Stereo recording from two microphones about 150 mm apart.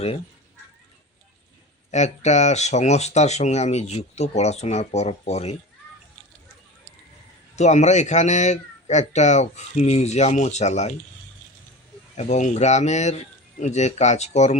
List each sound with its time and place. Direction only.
1.9 s speech: 50° left (ahead or behind)
7.5 s speech: 50° left (ahead or behind)
12.1 s speech: 50° left (ahead or behind)